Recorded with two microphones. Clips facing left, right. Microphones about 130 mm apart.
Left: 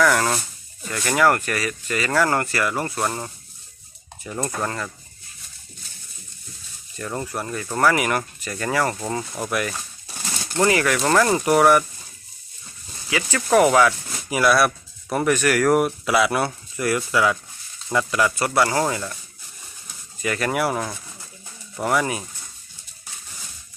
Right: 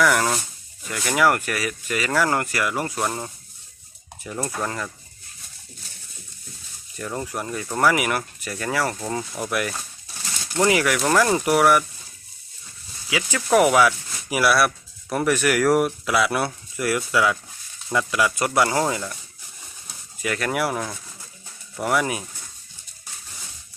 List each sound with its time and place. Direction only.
0.0 s speech: 5° right (ahead or behind)
7.2 s speech: 10° right (ahead or behind)
13.1 s speech: 10° right (ahead or behind)
15.4 s speech: 10° right (ahead or behind)
18.3 s speech: 20° right (ahead or behind)
20.2 s speech: centre (ahead or behind)